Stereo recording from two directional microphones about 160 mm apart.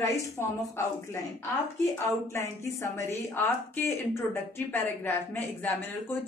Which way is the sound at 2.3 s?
20° left (ahead or behind).